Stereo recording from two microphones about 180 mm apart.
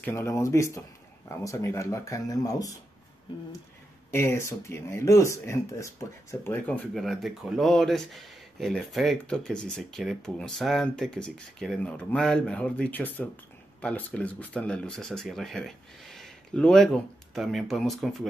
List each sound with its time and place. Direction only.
0.0 s speech: 15° left (ahead or behind)
4.1 s speech: 15° left (ahead or behind)